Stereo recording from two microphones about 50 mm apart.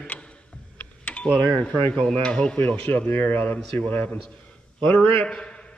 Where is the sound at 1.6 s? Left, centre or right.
Left.